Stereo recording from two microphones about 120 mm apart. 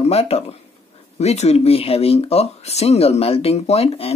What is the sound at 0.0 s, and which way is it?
Speech, 60° left (ahead or behind).